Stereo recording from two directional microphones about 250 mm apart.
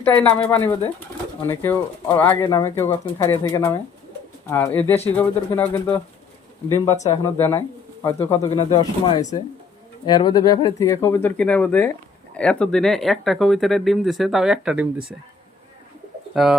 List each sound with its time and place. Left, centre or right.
0.0 s speech: centre
6.9 s speech: left
7.3 s speech: centre
16.3 s speech: centre